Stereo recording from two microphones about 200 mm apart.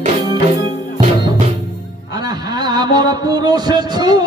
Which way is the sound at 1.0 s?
25° right (ahead or behind).